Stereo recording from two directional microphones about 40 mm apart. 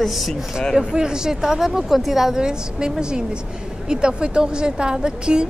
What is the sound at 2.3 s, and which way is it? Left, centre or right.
Speech, centre.